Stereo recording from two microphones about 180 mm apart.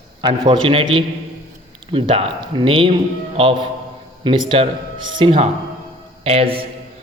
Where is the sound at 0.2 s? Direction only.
25° right (ahead or behind).